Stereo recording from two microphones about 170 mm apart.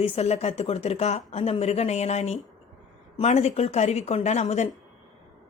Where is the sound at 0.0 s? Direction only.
40° left (ahead or behind).